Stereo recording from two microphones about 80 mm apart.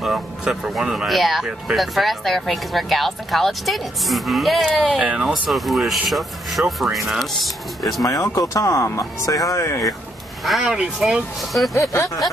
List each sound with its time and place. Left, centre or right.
0.0 s speech: centre
5.0 s speech: centre
5.5 s speech: centre
8.0 s speech: left
10.4 s speech: centre
11.9 s speech: left